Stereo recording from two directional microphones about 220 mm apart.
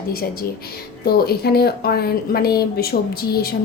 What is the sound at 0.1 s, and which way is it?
Speech, 40° left (ahead or behind).